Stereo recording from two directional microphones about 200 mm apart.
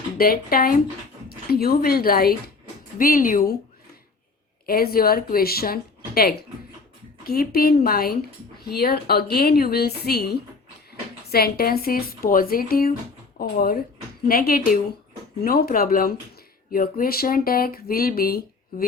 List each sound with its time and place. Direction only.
0.2 s speech: 45° left (ahead or behind)
4.6 s speech: 50° left (ahead or behind)